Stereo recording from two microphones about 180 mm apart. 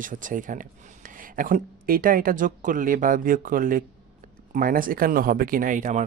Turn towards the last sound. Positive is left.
turn(degrees=-45)  # may be behind; listen again after turning